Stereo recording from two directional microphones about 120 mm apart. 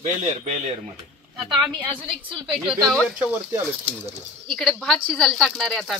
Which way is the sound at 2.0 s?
45° right (ahead or behind).